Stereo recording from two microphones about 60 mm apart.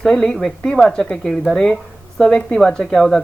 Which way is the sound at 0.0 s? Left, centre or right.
Centre.